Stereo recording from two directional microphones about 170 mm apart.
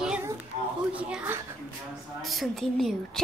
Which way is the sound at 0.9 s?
10° right (ahead or behind).